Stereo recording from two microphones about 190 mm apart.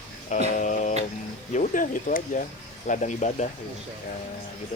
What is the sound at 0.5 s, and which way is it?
Speech, 40° left (ahead or behind).